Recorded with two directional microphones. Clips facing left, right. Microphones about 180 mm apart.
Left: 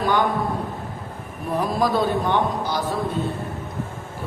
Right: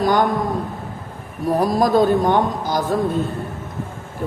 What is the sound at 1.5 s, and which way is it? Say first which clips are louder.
A man's voice: right 5 dB; 40° right (ahead or behind).